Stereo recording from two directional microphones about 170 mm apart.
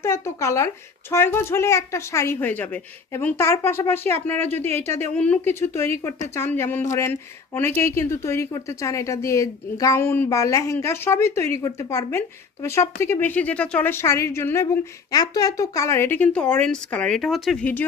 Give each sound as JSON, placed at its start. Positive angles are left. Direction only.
{"t": 0.0, "sound": "speech", "side_deg": 15}